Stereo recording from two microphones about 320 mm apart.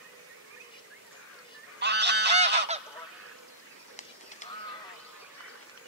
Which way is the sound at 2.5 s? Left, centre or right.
Right.